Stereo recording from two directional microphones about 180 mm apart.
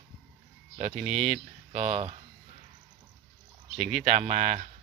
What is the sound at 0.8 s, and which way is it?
Speech, 35° right (ahead or behind).